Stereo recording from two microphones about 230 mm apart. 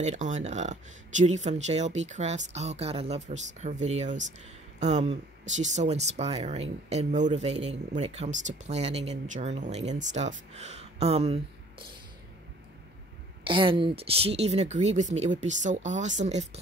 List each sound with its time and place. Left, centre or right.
0.0 s speech: right
13.4 s speech: right